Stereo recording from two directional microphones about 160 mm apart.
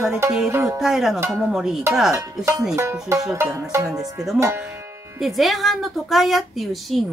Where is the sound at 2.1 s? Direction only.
20° right (ahead or behind).